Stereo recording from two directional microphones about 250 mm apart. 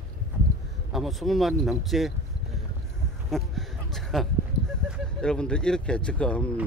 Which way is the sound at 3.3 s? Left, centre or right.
Centre.